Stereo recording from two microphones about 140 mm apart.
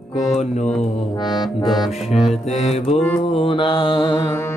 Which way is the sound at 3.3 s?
35° left (ahead or behind).